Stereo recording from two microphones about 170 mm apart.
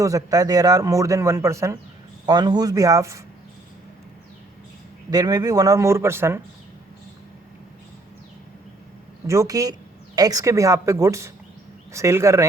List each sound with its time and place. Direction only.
0.0 s a man's voice: 20° right (ahead or behind)
5.1 s a man's voice: 20° right (ahead or behind)
9.2 s a man's voice: 15° right (ahead or behind)